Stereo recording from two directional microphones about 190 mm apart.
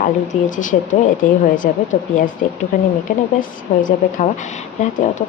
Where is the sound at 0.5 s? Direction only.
45° left (ahead or behind).